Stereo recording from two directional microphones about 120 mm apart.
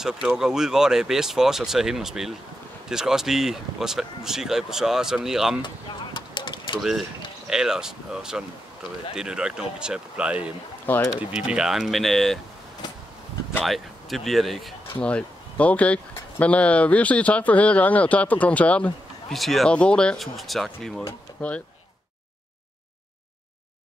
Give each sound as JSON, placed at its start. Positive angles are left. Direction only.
{"t": 0.0, "sound": "speech", "side_deg": -5}
{"t": 6.1, "sound": "a sound", "side_deg": 40}
{"t": 7.4, "sound": "speech", "side_deg": -5}
{"t": 13.6, "sound": "speech", "side_deg": 0}
{"t": 15.0, "sound": "speech", "side_deg": 10}